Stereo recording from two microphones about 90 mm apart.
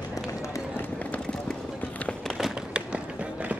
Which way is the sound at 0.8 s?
15° left (ahead or behind).